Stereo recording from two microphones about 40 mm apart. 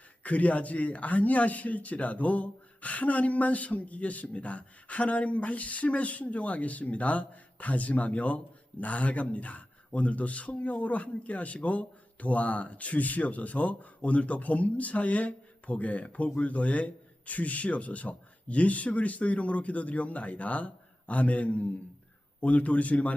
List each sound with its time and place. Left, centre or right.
0.2 s speech: left